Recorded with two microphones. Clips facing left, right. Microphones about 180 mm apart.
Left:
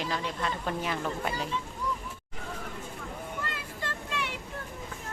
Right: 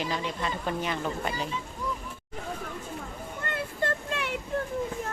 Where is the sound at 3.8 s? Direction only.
55° right (ahead or behind).